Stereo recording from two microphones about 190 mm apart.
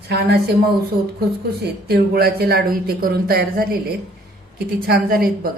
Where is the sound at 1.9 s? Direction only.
55° right (ahead or behind).